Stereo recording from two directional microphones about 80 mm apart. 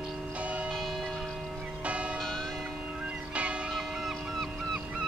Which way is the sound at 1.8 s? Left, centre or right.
Centre.